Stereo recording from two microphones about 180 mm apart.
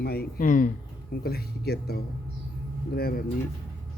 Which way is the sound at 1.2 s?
60° left (ahead or behind).